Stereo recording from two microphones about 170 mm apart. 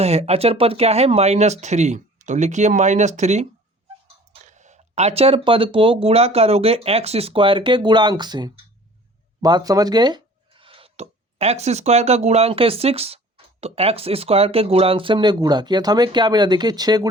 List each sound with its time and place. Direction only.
0.0 s speech: 40° right (ahead or behind)
4.4 s speech: 45° right (ahead or behind); by 17.1 s 25° right (ahead or behind)